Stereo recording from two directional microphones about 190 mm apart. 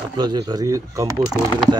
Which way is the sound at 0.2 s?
20° right (ahead or behind).